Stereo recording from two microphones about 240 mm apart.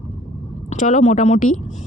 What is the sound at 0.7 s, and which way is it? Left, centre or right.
Speech, left.